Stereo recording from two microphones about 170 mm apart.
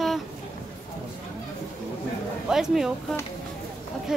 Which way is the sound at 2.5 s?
5° right (ahead or behind).